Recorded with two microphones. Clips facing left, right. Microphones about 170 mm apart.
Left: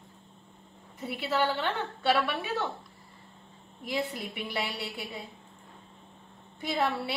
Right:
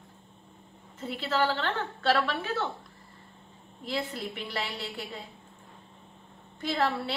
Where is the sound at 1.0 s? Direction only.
15° left (ahead or behind).